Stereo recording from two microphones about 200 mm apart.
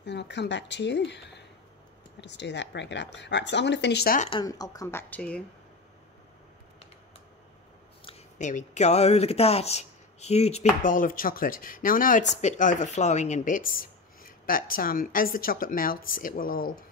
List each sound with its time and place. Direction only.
0.0 s speech: 60° left (ahead or behind)
4.2 s speech: 25° left (ahead or behind); by 5.4 s 5° left (ahead or behind)
8.0 s speech: 30° left (ahead or behind)